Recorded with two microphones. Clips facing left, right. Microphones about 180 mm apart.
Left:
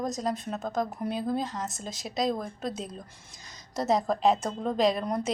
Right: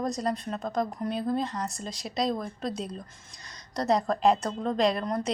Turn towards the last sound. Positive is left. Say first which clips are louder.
# even
turn(degrees=5)  # may be behind; listen again after turning